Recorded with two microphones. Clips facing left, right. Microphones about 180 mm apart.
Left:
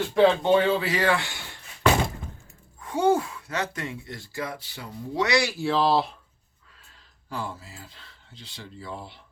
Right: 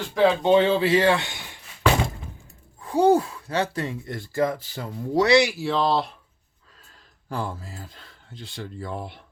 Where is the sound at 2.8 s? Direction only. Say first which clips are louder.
Right 4 dB; 35° right (ahead or behind).